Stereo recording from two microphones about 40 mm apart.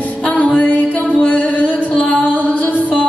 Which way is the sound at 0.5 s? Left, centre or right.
Left.